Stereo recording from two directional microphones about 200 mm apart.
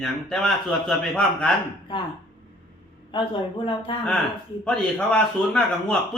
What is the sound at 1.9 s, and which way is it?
Speech, 25° left (ahead or behind).